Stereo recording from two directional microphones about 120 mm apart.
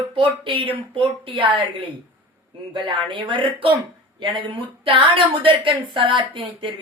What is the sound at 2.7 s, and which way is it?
A woman's voice, 40° right (ahead or behind).